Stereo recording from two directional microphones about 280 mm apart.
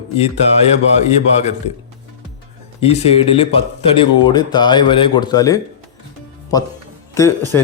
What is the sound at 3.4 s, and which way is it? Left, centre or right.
Speech, centre.